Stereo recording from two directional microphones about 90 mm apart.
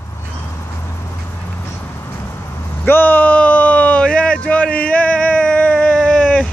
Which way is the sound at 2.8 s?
20° left (ahead or behind).